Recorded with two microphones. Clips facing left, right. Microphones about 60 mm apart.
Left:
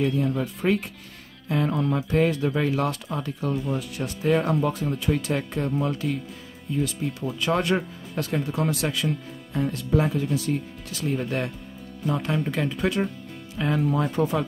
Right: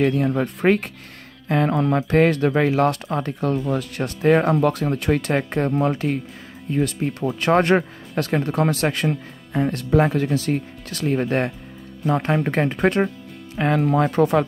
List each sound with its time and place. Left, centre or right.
0.0 s speech: right
1.5 s speech: right
12.1 s speech: right